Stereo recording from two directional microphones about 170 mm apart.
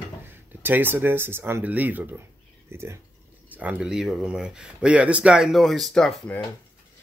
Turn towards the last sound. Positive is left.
turn(degrees=5)  # may be behind; listen again after turning